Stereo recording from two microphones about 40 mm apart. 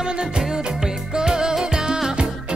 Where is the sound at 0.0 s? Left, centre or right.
Centre.